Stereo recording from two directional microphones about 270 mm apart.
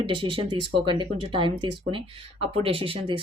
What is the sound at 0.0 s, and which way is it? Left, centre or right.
Speech, centre.